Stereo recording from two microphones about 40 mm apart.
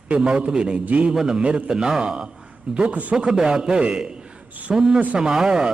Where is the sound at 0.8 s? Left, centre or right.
Right.